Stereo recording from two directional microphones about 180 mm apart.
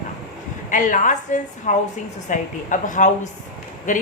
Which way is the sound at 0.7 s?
45° left (ahead or behind).